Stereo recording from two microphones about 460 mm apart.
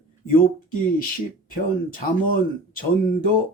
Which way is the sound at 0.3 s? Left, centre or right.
Centre.